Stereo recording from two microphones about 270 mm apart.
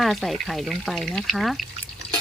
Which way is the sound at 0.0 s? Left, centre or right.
Centre.